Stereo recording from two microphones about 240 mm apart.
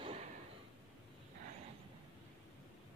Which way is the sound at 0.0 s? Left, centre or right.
Right.